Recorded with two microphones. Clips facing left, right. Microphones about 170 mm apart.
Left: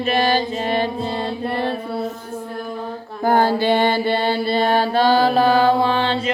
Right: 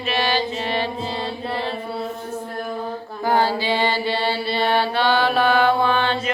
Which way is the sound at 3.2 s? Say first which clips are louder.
Left 4 dB; 50° left (ahead or behind).